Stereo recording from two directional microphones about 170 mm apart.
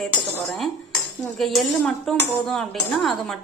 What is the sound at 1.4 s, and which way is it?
Speech, centre (ahead or behind).